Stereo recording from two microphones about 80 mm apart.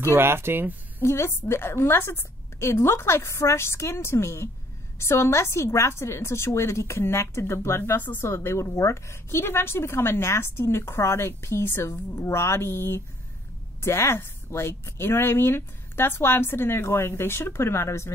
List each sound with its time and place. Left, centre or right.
0.1 s speech: right
0.9 s a woman's voice: left